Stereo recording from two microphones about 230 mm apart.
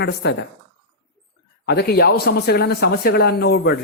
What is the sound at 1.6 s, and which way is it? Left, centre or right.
Speech, left.